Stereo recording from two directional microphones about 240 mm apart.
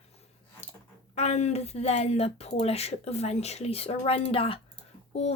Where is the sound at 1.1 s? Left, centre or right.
Left.